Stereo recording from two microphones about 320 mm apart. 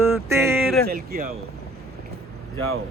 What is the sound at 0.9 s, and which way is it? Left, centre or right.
Speech, right.